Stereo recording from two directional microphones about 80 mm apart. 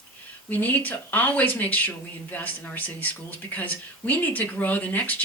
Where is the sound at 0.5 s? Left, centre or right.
Left.